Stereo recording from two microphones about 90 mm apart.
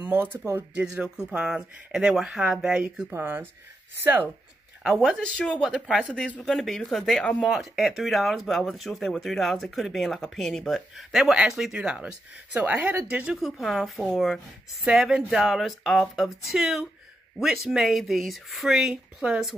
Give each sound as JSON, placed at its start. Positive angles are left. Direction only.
{"t": 0.7, "sound": "speech", "side_deg": -10}
{"t": 3.2, "sound": "speech", "side_deg": -25}
{"t": 4.8, "sound": "speech", "side_deg": -5}
{"t": 5.4, "sound": "speech", "side_deg": 10}
{"t": 7.4, "sound": "speech", "side_deg": 0}